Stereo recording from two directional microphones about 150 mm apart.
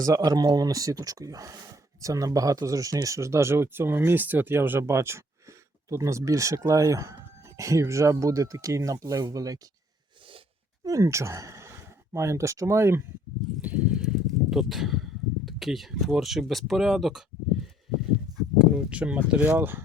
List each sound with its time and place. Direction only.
0.0 s speech: 25° right (ahead or behind)
10.8 s speech: 20° right (ahead or behind)
13.6 s a sound: 10° right (ahead or behind)
15.4 s speech: centre (ahead or behind)
18.6 s speech: 5° right (ahead or behind)